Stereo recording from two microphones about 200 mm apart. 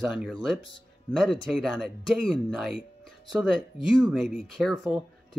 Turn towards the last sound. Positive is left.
turn(degrees=0)  # may be behind; listen again after turning